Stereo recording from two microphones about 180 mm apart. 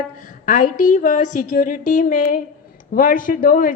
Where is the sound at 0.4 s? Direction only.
45° left (ahead or behind).